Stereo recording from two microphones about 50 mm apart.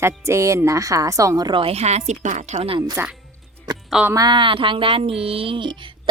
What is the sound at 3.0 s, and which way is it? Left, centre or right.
Speech, right.